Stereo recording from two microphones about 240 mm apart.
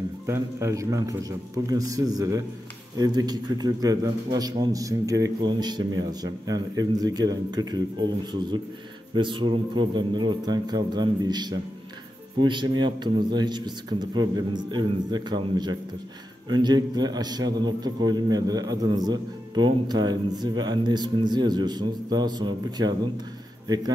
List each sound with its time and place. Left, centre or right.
0.3 s a man's voice: centre